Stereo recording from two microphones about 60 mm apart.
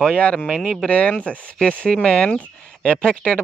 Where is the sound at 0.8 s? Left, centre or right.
Left.